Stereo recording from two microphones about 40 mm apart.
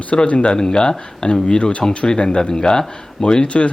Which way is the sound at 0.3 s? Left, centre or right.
Left.